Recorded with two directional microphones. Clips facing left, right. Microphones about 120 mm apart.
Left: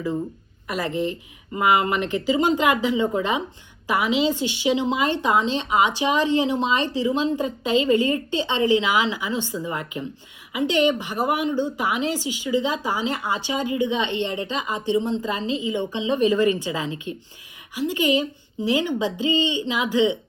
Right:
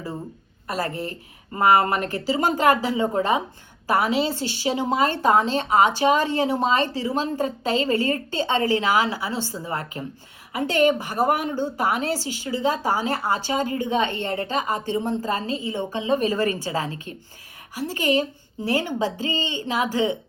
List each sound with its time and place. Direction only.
0.7 s a woman's voice: 40° right (ahead or behind)